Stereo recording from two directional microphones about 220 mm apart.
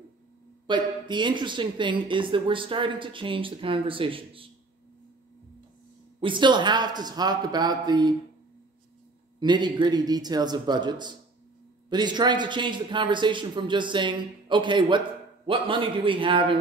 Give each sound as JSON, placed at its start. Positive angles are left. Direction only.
{"t": 0.7, "sound": "speech", "side_deg": -20}
{"t": 6.2, "sound": "speech", "side_deg": -20}
{"t": 9.4, "sound": "speech", "side_deg": -20}